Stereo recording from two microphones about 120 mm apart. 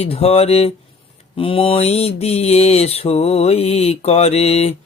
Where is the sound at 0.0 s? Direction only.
55° left (ahead or behind).